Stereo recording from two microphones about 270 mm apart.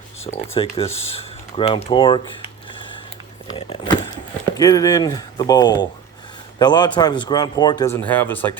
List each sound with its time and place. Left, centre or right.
0.5 s speech: left
3.5 s speech: left